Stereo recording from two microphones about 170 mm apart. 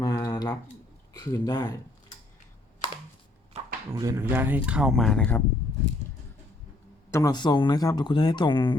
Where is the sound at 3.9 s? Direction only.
20° right (ahead or behind); by 5.4 s 5° left (ahead or behind).